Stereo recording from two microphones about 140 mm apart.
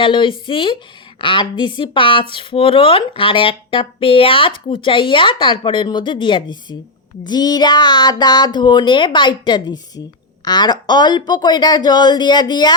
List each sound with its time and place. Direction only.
0.0 s speech: 35° left (ahead or behind)